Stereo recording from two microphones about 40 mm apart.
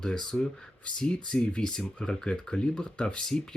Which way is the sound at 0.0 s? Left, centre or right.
Centre.